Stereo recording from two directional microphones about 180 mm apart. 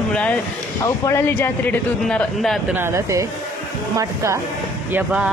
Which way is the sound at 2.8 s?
15° right (ahead or behind).